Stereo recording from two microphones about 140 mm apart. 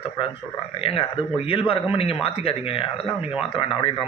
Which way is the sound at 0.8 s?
40° left (ahead or behind).